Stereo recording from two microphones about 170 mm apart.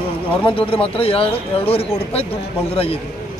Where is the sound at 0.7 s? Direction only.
35° left (ahead or behind).